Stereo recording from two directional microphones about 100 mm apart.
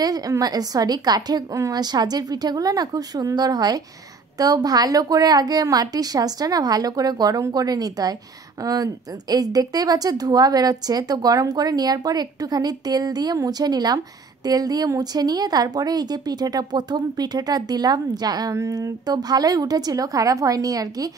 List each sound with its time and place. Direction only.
0.0 s speech: 40° right (ahead or behind)